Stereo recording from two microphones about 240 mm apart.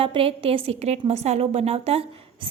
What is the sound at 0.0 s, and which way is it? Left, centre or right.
A woman's voice, right.